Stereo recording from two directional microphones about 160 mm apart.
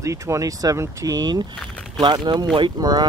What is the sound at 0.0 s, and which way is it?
Speech, 20° right (ahead or behind).